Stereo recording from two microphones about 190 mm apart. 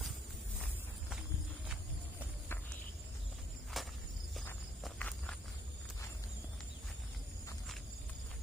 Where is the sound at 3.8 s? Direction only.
Centre (ahead or behind).